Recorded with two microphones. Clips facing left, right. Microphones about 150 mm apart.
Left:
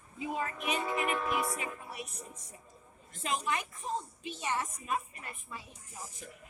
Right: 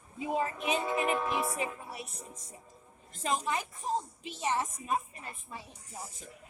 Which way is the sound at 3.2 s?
35° right (ahead or behind).